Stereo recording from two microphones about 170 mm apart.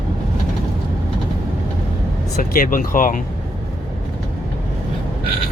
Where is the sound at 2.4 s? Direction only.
55° left (ahead or behind).